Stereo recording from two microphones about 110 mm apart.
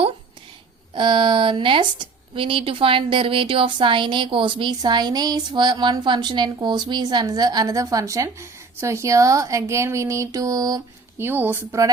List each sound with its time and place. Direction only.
0.9 s speech: 50° right (ahead or behind)
11.2 s speech: 20° right (ahead or behind)